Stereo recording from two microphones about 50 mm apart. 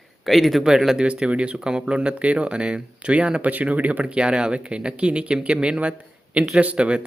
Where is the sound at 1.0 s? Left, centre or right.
Right.